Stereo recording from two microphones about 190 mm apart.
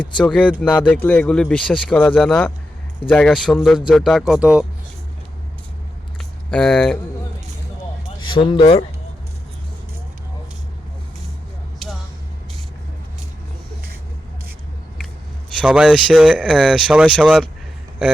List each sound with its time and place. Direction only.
0.3 s speech: 5° left (ahead or behind)
6.5 s speech: 5° left (ahead or behind)
8.2 s speech: 25° left (ahead or behind)
15.6 s speech: 5° right (ahead or behind)